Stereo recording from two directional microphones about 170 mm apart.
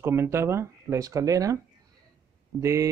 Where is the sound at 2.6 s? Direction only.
15° right (ahead or behind).